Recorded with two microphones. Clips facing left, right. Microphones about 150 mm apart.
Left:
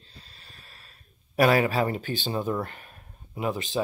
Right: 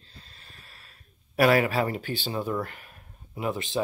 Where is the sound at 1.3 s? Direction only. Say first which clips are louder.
Even; 20° left (ahead or behind).